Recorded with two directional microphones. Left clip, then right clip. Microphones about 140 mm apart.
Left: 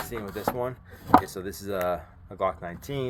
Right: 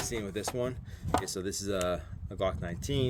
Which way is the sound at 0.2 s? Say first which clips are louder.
Left 7 dB; 55° right (ahead or behind).